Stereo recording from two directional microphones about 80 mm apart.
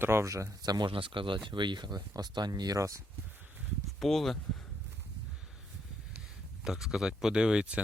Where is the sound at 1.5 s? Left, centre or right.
Right.